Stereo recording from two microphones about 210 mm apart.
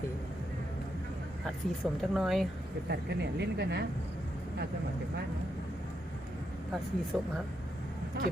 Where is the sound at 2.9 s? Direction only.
50° right (ahead or behind).